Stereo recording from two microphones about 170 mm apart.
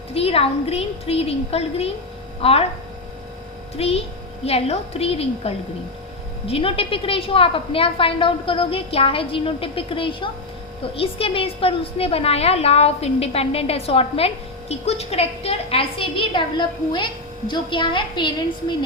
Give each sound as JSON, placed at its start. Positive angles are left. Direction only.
{"t": 0.1, "sound": "a woman's voice", "side_deg": 35}
{"t": 3.8, "sound": "a woman's voice", "side_deg": 35}